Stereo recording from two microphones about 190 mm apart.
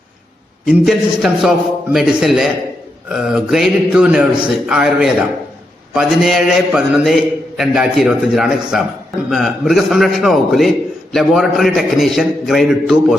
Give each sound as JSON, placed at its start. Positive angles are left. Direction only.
{"t": 0.6, "sound": "a man's voice", "side_deg": 0}